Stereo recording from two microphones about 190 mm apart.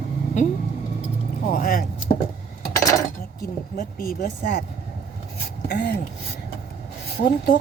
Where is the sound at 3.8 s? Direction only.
45° left (ahead or behind).